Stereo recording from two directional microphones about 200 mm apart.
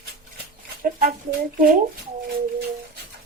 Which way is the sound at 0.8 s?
45° right (ahead or behind).